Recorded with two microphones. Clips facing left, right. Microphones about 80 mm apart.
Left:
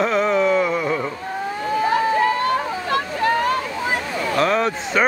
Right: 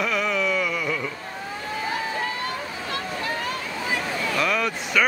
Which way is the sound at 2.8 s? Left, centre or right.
Left.